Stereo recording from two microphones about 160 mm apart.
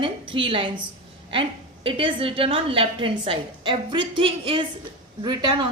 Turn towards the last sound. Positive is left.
turn(degrees=-25)  # may be behind; listen again after turning